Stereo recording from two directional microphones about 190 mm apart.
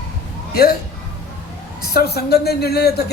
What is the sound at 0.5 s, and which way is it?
Speech, 55° left (ahead or behind).